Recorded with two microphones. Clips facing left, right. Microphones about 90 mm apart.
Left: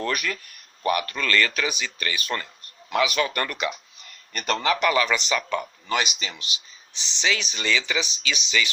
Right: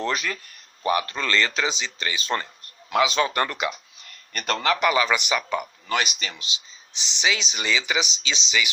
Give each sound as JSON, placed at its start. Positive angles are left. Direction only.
{"t": 0.0, "sound": "speech", "side_deg": -20}
{"t": 4.3, "sound": "a man's voice", "side_deg": 0}
{"t": 4.8, "sound": "speech", "side_deg": -15}
{"t": 6.1, "sound": "speech", "side_deg": 20}
{"t": 6.4, "sound": "speech", "side_deg": -20}